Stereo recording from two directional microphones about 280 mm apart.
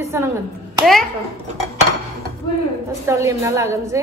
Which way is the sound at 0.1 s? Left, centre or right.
Centre.